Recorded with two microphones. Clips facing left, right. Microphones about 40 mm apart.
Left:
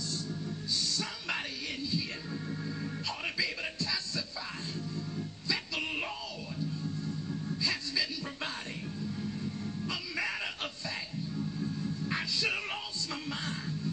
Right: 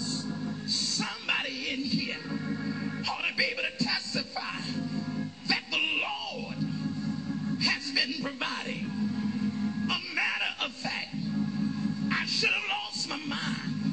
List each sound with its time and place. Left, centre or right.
0.1 s music: right
2.3 s organ: right
4.7 s music: right
7.6 s a sound: right
9.1 s music: right